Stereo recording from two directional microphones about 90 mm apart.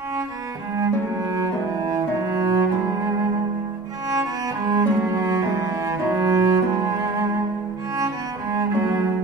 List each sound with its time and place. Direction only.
1.3 s cello: 40° right (ahead or behind)
4.1 s cello: 40° right (ahead or behind)